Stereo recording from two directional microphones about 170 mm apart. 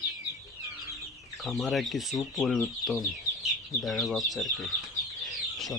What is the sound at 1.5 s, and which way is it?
Speech, centre (ahead or behind).